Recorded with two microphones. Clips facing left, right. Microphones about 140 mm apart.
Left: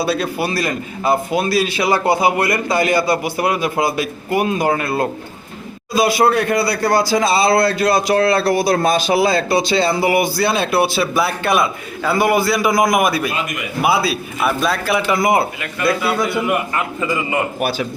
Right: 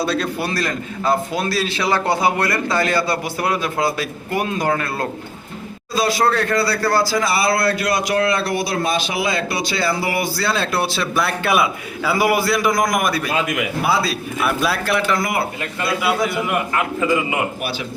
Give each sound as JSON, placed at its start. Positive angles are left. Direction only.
{"t": 0.0, "sound": "a man's voice", "side_deg": 10}
{"t": 15.0, "sound": "a man's voice", "side_deg": 15}
{"t": 16.0, "sound": "a man's voice", "side_deg": -5}
{"t": 17.6, "sound": "speech", "side_deg": 45}